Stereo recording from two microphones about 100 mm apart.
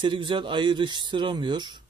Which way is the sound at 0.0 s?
55° right (ahead or behind).